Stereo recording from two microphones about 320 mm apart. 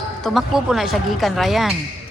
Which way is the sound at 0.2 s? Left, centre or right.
Centre.